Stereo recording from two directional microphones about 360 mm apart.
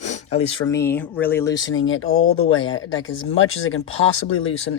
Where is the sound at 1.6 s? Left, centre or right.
Left.